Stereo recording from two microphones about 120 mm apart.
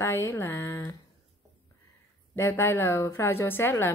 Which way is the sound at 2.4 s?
20° left (ahead or behind).